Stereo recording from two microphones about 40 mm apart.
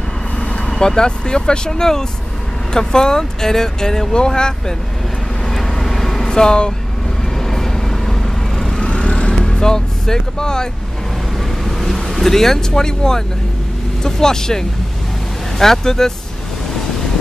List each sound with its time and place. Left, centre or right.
0.4 s speech: centre
5.5 s vehicle: centre
7.3 s vehicle: centre
8.8 s vehicle: left
11.6 s speech: centre